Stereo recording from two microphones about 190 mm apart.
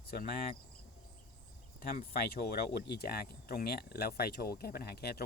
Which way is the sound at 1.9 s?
55° left (ahead or behind).